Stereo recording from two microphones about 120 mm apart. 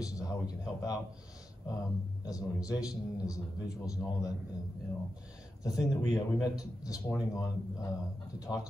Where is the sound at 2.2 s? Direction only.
30° left (ahead or behind).